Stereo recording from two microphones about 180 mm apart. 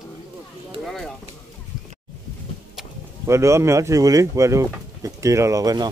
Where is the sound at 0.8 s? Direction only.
Centre (ahead or behind).